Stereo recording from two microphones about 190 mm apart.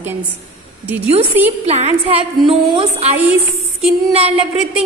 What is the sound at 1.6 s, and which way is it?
A woman's voice, 35° right (ahead or behind).